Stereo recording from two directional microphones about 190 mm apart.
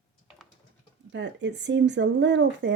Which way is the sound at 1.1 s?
70° right (ahead or behind).